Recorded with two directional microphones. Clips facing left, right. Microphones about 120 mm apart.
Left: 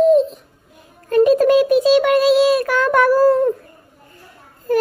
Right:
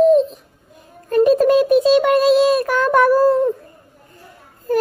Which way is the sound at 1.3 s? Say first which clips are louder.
Even; 35° right (ahead or behind).